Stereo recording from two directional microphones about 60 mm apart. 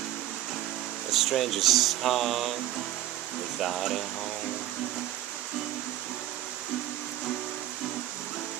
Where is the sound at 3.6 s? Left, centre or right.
Centre.